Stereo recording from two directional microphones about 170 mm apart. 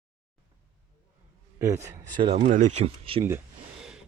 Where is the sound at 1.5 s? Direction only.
15° right (ahead or behind).